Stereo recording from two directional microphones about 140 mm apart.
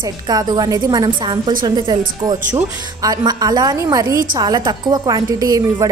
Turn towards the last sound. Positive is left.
turn(degrees=-25)  # may be behind; listen again after turning